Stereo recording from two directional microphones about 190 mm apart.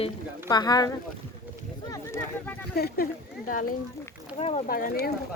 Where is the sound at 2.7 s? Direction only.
55° left (ahead or behind).